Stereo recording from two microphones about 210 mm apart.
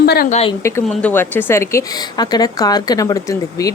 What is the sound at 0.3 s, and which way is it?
Speech, 30° left (ahead or behind).